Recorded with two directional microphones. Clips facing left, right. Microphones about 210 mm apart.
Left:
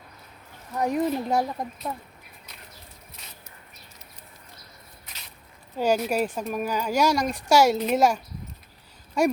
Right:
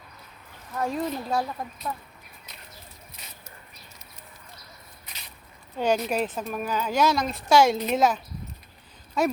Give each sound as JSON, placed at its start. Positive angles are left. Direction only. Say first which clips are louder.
{"t": 0.8, "sound": "speech", "louder": "left 4 dB", "side_deg": 15}
{"t": 5.7, "sound": "a woman's voice", "louder": "left 1 dB", "side_deg": 10}